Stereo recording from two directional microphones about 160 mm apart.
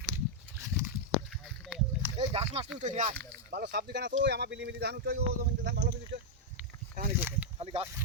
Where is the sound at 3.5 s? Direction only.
85° right.